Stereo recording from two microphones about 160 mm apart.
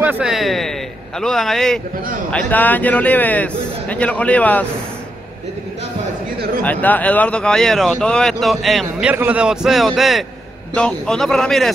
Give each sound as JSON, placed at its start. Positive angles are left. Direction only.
{"t": 0.0, "sound": "speech", "side_deg": -10}
{"t": 6.6, "sound": "speech", "side_deg": 10}